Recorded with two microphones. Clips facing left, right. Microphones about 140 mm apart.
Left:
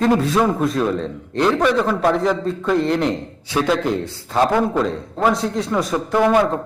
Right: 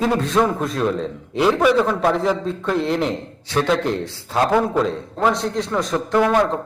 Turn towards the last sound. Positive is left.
turn(degrees=5)  # may be behind; listen again after turning